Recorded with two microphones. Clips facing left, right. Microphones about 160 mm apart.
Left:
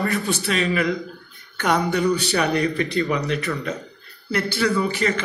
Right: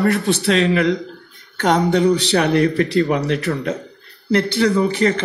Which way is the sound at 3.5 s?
40° right (ahead or behind).